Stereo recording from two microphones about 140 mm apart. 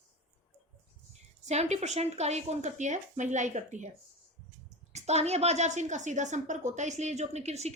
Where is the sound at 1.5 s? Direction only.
55° right (ahead or behind).